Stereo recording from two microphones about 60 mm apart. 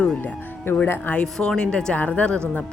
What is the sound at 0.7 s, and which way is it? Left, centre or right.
Speech, left.